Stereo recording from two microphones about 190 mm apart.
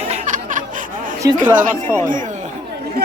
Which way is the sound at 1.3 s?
45° right (ahead or behind).